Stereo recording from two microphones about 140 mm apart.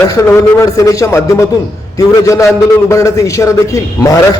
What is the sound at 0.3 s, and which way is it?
A man's voice, 20° left (ahead or behind).